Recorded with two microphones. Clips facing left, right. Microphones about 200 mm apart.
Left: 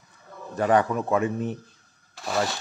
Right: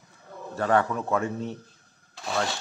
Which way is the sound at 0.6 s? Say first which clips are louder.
Left 3 dB; 15° left (ahead or behind).